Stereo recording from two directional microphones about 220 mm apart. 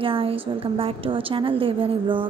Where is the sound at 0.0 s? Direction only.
25° right (ahead or behind).